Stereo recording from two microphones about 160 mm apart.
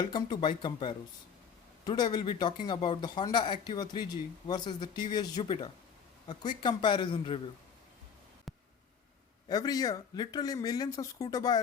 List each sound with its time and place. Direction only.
0.0 s a man's voice: 30° left (ahead or behind)
8.5 s a sound: centre (ahead or behind)
9.5 s speech: 25° left (ahead or behind)